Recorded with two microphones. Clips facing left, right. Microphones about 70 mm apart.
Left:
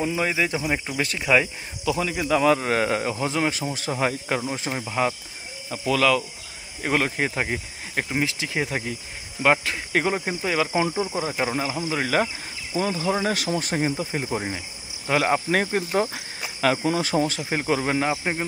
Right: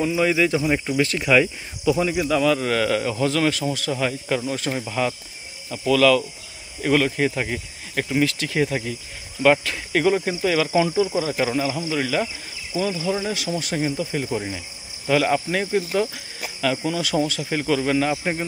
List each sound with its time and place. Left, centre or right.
0.0 s speech: left
0.6 s speech: centre
1.3 s speech: left
1.9 s speech: centre
2.4 s speech: left
3.3 s speech: left
11.6 s speech: left
15.5 s speech: left